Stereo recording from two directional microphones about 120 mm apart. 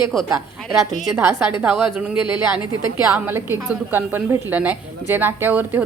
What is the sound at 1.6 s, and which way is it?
A woman's voice, 10° right (ahead or behind).